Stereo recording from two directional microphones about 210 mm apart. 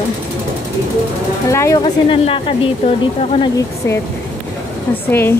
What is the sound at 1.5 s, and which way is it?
Speech, 15° left (ahead or behind).